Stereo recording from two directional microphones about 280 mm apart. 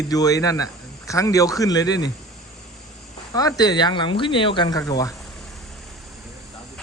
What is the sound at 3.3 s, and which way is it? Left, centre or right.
Speech, centre.